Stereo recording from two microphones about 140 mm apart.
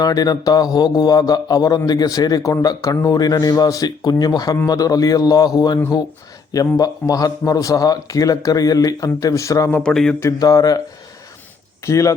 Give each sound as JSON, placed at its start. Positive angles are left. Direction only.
{"t": 0.0, "sound": "a man's voice", "side_deg": 25}
{"t": 9.8, "sound": "mantra", "side_deg": 5}
{"t": 10.2, "sound": "a man's voice", "side_deg": 25}